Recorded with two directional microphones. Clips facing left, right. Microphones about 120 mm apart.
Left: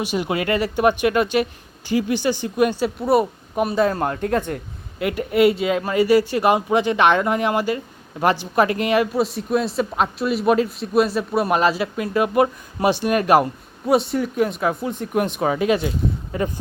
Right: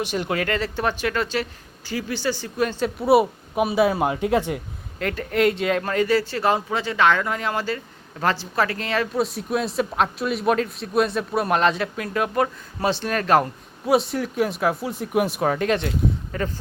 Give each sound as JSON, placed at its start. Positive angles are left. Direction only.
{"t": 0.0, "sound": "speech", "side_deg": 10}
{"t": 4.9, "sound": "speech", "side_deg": 10}
{"t": 9.1, "sound": "speech", "side_deg": 0}
{"t": 13.8, "sound": "speech", "side_deg": 0}